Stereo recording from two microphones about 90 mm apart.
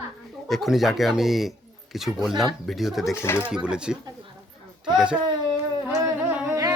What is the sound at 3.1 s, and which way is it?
Speech, 30° left (ahead or behind).